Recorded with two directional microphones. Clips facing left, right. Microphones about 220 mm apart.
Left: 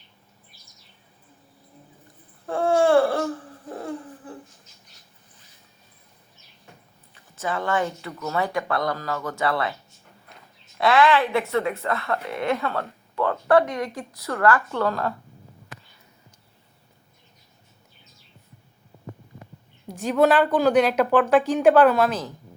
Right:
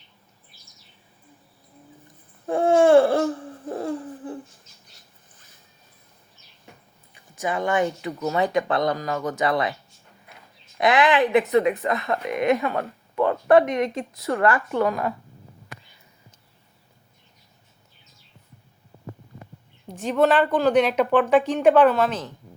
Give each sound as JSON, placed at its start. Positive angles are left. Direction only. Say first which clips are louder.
{"t": 2.5, "sound": "a sound", "louder": "right 3 dB", "side_deg": -20}
{"t": 7.1, "sound": "speech", "louder": "right 2 dB", "side_deg": -15}
{"t": 10.8, "sound": "a woman's voice", "louder": "even", "side_deg": -15}
{"t": 19.9, "sound": "speech", "louder": "left 1 dB", "side_deg": 5}